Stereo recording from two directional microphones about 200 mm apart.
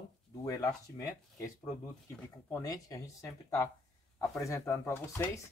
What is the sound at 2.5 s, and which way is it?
Speech, 15° left (ahead or behind).